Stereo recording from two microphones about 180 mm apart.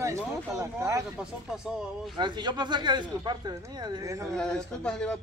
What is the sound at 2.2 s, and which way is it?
Speech, 25° right (ahead or behind).